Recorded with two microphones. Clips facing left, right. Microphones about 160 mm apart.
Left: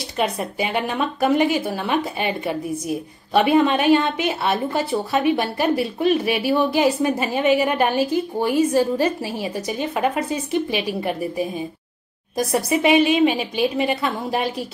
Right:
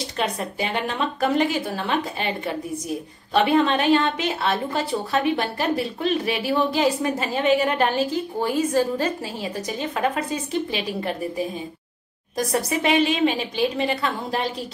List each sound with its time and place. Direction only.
0.2 s a woman's voice: 10° left (ahead or behind)